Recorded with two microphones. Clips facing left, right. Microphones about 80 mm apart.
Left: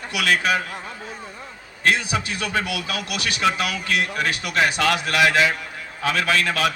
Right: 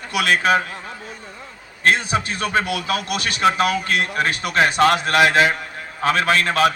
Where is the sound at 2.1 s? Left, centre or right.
Right.